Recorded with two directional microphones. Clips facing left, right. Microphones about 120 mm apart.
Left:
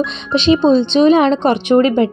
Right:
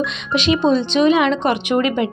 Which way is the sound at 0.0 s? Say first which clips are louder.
Left 4 dB; 30° left (ahead or behind).